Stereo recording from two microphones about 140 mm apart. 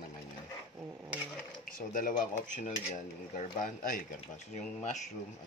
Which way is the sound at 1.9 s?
70° left (ahead or behind).